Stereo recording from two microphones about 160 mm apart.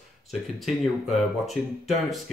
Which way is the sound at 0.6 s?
Centre (ahead or behind).